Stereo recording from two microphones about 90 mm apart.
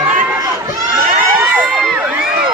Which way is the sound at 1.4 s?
15° right (ahead or behind).